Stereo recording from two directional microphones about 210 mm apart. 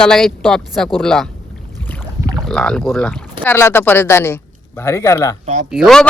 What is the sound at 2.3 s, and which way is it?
Speech, centre (ahead or behind).